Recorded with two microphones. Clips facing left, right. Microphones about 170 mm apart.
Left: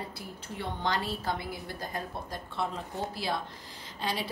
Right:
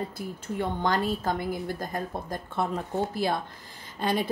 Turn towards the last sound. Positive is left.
turn(degrees=-50)  # may be behind; listen again after turning